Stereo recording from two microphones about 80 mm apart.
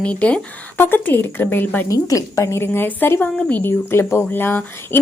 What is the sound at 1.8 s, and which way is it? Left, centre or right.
A woman's voice, left.